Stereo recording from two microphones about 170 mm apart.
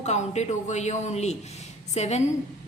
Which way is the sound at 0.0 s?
40° left (ahead or behind).